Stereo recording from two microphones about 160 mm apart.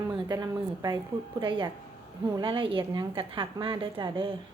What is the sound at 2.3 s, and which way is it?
A woman's voice, 30° right (ahead or behind).